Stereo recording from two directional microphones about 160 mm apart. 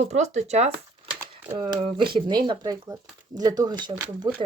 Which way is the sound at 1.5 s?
35° right (ahead or behind).